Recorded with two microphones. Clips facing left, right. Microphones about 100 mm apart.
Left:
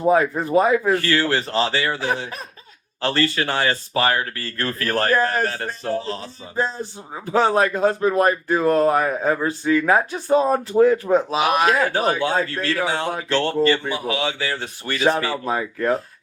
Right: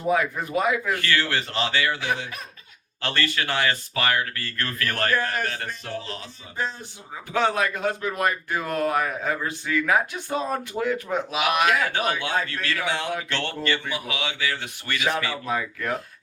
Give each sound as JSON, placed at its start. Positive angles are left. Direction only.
{"t": 0.1, "sound": "a man's voice", "side_deg": 30}